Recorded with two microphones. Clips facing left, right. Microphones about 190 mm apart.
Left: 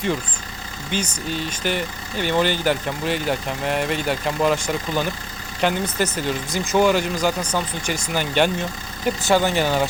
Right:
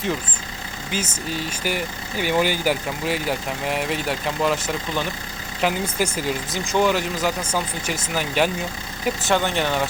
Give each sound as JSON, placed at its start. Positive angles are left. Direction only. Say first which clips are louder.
{"t": 0.9, "sound": "speech", "louder": "left 2 dB", "side_deg": -5}